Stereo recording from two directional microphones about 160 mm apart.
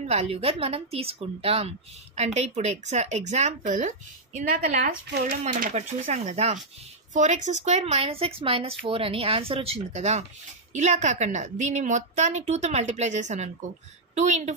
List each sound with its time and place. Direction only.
0.0 s a woman's voice: 40° right (ahead or behind)